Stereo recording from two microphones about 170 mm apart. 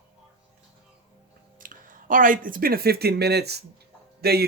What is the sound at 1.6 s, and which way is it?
A man's voice, 50° right (ahead or behind).